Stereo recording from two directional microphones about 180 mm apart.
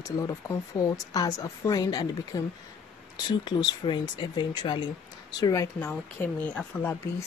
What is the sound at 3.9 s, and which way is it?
Speech, 25° left (ahead or behind).